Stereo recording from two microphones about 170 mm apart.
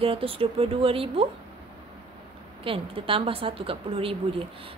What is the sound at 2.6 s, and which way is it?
A woman's voice, 30° right (ahead or behind).